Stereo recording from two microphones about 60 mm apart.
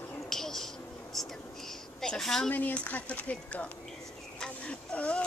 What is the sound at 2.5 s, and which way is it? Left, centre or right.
Speech, left.